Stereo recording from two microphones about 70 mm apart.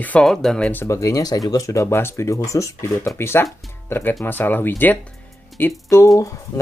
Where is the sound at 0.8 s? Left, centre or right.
Left.